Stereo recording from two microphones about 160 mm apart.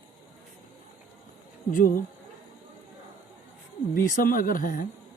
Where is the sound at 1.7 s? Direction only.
60° left (ahead or behind).